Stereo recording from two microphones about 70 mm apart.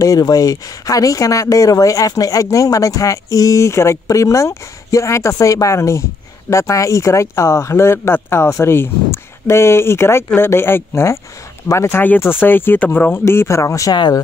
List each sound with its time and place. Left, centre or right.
0.0 s speech: left
12.2 s speech: left
13.2 s speech: left
13.9 s speech: left